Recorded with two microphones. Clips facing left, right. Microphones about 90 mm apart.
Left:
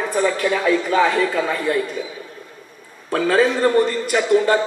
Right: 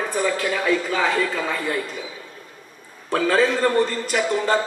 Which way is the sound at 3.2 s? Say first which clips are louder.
Left 2 dB; 40° left (ahead or behind).